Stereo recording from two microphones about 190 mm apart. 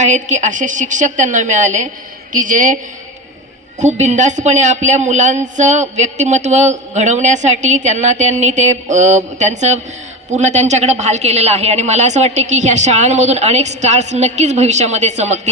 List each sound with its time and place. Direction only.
0.0 s a woman's voice: 40° right (ahead or behind)
3.8 s speech: 40° right (ahead or behind)